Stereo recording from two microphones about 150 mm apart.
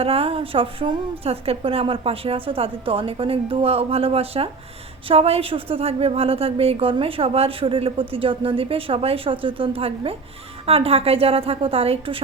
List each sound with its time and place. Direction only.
0.0 s a woman's voice: 40° right (ahead or behind)